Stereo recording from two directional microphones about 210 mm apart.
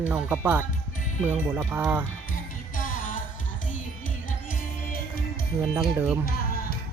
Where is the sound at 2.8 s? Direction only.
40° left (ahead or behind).